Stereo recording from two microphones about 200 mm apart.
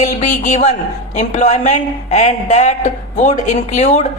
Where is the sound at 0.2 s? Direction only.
35° left (ahead or behind).